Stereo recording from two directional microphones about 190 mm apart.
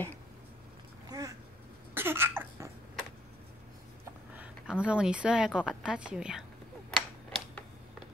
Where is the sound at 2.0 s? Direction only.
10° right (ahead or behind).